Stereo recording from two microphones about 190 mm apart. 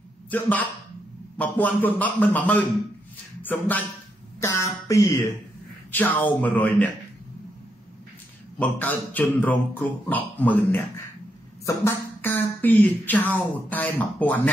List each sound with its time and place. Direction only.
0.3 s speech: 10° left (ahead or behind)
8.5 s speech: 10° left (ahead or behind)